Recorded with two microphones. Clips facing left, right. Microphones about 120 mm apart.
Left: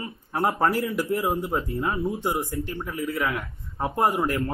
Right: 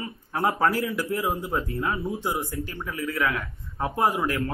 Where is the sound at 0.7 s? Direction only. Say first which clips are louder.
Left 1 dB; 25° left (ahead or behind).